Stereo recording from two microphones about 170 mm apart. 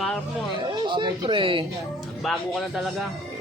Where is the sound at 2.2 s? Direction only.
Centre (ahead or behind).